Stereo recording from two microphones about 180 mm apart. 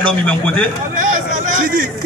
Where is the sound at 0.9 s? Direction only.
45° right (ahead or behind).